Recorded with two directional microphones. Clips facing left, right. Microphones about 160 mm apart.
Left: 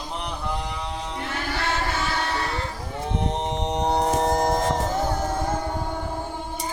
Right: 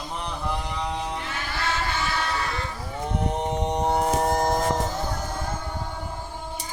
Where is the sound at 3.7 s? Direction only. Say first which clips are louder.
Left 2 dB; 20° left (ahead or behind).